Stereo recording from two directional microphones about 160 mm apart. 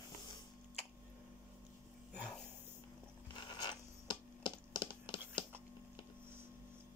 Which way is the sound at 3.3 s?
30° left (ahead or behind).